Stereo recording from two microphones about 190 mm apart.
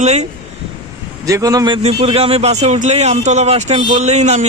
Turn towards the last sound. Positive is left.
turn(degrees=-35)  # may be behind; listen again after turning